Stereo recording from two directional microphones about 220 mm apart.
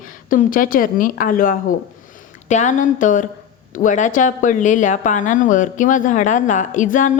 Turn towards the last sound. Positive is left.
turn(degrees=35)  # may be behind; listen again after turning